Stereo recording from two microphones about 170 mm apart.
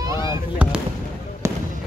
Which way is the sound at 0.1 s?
25° left (ahead or behind).